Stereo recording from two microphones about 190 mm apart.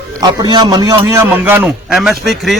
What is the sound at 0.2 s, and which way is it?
A man's voice, 20° right (ahead or behind).